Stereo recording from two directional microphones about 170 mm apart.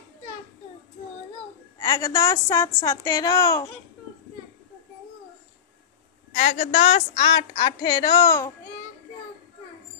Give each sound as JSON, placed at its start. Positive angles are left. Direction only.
{"t": 1.8, "sound": "a woman's voice", "side_deg": 20}
{"t": 6.3, "sound": "a woman's voice", "side_deg": 45}
{"t": 6.8, "sound": "a woman's voice", "side_deg": 30}